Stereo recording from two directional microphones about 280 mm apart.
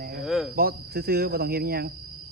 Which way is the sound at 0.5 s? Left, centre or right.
Right.